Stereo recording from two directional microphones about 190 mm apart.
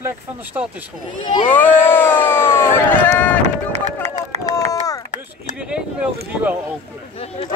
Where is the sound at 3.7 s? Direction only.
35° right (ahead or behind).